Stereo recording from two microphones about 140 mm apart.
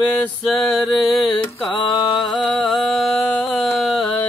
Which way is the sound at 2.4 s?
Centre (ahead or behind).